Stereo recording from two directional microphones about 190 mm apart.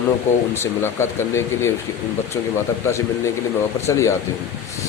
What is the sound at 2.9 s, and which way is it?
Speech, 15° left (ahead or behind).